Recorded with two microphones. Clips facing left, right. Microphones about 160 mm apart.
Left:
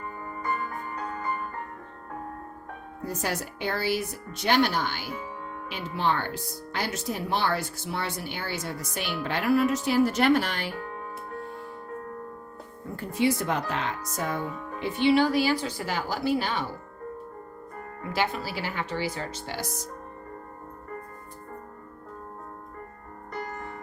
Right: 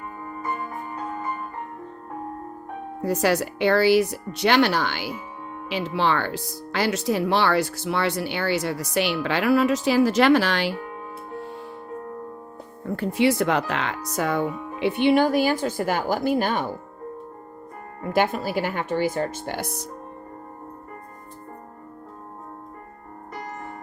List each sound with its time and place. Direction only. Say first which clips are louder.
3.0 s speech: right 9 dB; 80° right
13.0 s speech: right 5 dB; 75° right (ahead or behind)
14.8 s a woman's voice: right 3 dB; 65° right (ahead or behind)
18.1 s a woman's voice: right 7 dB; 50° right (ahead or behind)